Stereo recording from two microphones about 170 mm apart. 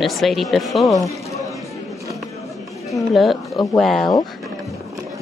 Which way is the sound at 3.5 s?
20° left (ahead or behind).